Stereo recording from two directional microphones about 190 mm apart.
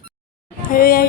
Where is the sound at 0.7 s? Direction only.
50° left (ahead or behind).